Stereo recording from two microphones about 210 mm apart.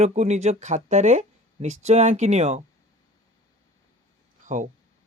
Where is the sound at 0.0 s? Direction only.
30° right (ahead or behind).